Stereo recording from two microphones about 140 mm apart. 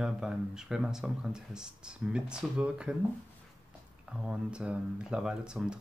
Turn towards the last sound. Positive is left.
turn(degrees=-5)  # may be behind; listen again after turning